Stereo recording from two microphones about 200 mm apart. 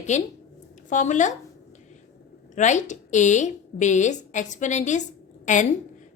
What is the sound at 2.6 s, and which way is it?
A woman's voice, 35° left (ahead or behind).